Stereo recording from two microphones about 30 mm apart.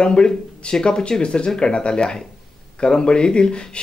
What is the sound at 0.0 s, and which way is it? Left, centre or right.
Speech, left.